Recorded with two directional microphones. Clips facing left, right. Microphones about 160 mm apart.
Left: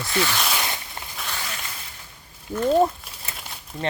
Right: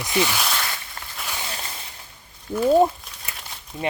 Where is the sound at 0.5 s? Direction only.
20° left (ahead or behind).